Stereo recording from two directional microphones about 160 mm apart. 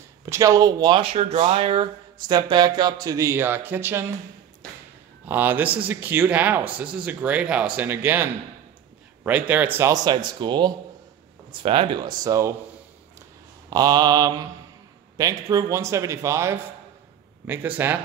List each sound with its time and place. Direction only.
0.2 s speech: 20° right (ahead or behind)
5.2 s speech: 10° right (ahead or behind)
13.7 s speech: 25° right (ahead or behind)